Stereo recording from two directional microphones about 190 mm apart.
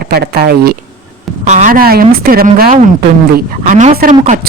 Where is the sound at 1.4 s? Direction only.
40° right (ahead or behind).